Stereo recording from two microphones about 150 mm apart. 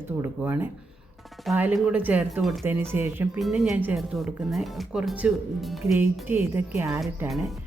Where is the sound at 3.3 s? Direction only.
5° right (ahead or behind).